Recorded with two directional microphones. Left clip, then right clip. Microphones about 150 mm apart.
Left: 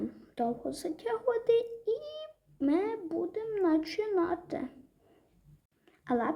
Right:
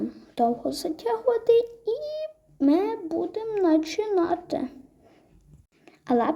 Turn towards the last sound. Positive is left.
turn(degrees=-30)  # may be behind; listen again after turning